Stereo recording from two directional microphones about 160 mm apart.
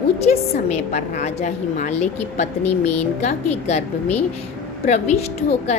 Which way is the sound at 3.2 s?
45° left (ahead or behind).